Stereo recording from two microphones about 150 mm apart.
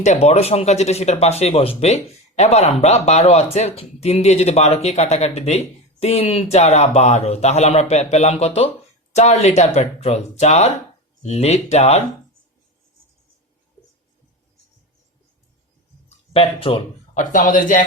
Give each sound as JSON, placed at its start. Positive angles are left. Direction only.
{"t": 0.0, "sound": "speech", "side_deg": 50}
{"t": 16.0, "sound": "a sound", "side_deg": 40}
{"t": 17.2, "sound": "speech", "side_deg": 60}